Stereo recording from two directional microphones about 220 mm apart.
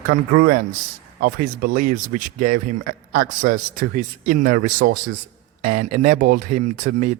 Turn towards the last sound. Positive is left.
turn(degrees=-35)  # may be behind; listen again after turning